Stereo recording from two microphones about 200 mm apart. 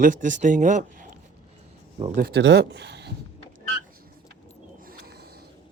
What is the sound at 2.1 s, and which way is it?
Speech, 50° right (ahead or behind).